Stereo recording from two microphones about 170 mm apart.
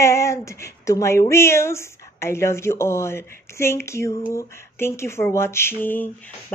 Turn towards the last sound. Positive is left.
turn(degrees=10)  # may be behind; listen again after turning